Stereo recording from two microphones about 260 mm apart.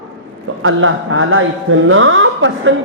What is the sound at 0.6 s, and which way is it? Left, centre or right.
A woman's voice, right.